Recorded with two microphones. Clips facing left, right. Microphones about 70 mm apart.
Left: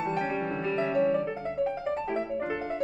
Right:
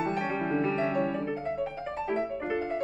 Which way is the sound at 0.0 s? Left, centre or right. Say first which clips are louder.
Even; centre.